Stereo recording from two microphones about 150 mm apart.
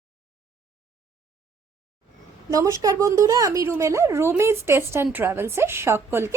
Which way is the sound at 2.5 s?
20° right (ahead or behind).